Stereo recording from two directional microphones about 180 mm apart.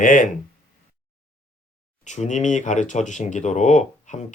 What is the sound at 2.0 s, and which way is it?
Speech, 40° left (ahead or behind).